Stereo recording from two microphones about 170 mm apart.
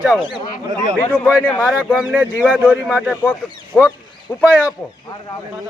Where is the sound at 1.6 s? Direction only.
5° right (ahead or behind).